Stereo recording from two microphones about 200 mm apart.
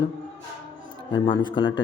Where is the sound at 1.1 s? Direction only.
25° left (ahead or behind).